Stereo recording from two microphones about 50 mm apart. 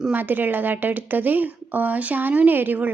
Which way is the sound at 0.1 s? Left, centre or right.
Right.